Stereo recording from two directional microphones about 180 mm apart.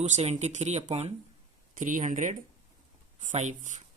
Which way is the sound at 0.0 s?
40° right (ahead or behind).